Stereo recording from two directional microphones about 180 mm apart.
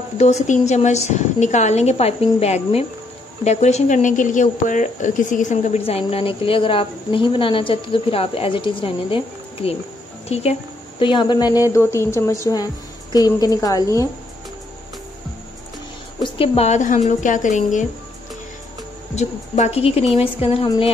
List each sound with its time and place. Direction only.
0.2 s a woman's voice: 40° left (ahead or behind); by 14.0 s 20° left (ahead or behind)
16.3 s speech: 35° left (ahead or behind)
19.1 s speech: 40° left (ahead or behind)